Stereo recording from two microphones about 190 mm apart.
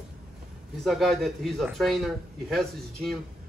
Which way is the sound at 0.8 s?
Centre (ahead or behind).